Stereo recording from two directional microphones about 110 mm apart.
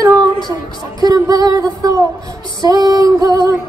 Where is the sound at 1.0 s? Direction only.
35° right (ahead or behind).